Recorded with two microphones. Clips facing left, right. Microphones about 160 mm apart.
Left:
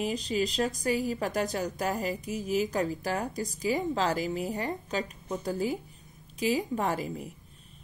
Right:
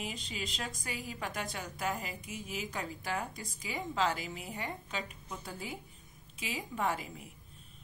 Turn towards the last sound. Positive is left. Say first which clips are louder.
# left 5 dB
turn(degrees=40)  # may be behind; listen again after turning